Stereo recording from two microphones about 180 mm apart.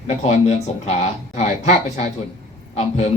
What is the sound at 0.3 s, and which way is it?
A man's voice, 40° left (ahead or behind).